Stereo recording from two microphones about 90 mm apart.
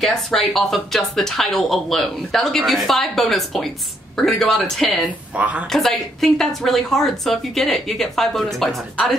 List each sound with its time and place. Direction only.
0.0 s speech: 5° left (ahead or behind)
5.3 s a woman's voice: 15° right (ahead or behind)
5.7 s speech: 5° left (ahead or behind)